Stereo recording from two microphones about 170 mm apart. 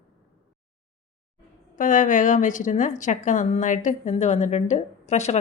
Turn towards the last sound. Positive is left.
turn(degrees=40)  # may be behind; listen again after turning